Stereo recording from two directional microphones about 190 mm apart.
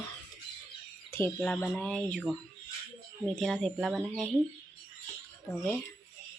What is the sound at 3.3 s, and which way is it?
Speech, centre (ahead or behind).